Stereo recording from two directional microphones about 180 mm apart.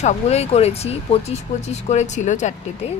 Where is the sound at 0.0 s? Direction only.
35° left (ahead or behind).